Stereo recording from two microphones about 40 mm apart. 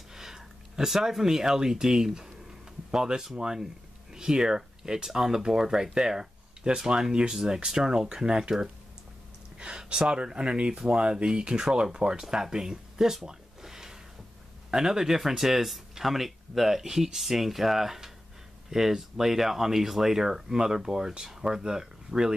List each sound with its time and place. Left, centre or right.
0.1 s speech: centre